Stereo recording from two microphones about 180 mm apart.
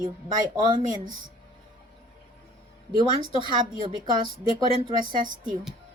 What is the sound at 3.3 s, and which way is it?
A woman's voice, 25° right (ahead or behind).